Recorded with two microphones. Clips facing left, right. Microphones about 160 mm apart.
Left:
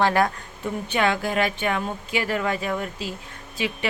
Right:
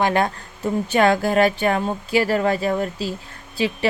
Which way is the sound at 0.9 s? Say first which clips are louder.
Right 6 dB; 40° right (ahead or behind).